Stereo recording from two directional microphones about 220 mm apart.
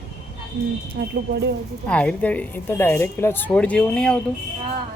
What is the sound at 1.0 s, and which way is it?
Speech, 45° right (ahead or behind).